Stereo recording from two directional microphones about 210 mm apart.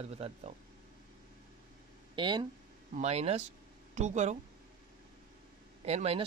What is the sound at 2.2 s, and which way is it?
Speech, 20° right (ahead or behind).